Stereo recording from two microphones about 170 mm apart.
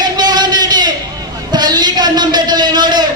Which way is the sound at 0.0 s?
25° right (ahead or behind).